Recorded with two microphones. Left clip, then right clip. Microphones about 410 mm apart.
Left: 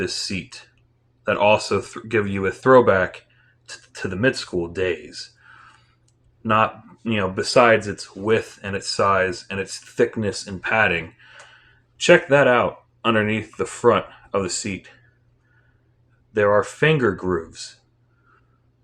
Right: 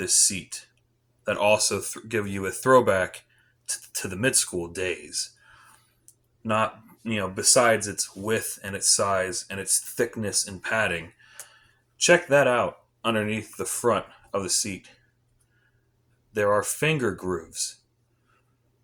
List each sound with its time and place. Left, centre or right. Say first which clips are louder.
0.0 s speech: right 1 dB; right
6.4 s speech: left 6 dB; right
16.3 s speech: left 5 dB; right